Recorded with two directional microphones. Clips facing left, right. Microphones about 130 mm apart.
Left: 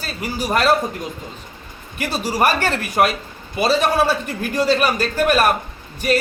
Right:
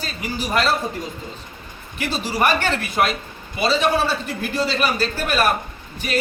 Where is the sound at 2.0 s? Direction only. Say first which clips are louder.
Left 2 dB; 40° left (ahead or behind).